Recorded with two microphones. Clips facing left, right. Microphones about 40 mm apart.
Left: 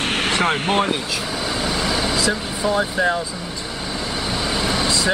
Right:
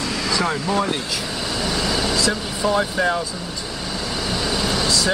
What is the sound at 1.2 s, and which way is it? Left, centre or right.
Vehicle, left.